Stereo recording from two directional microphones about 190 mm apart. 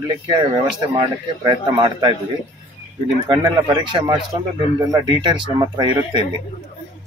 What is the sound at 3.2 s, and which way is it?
Speech, 25° right (ahead or behind).